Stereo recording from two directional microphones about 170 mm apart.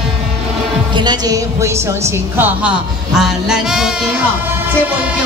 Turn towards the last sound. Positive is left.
turn(degrees=-5)  # may be behind; listen again after turning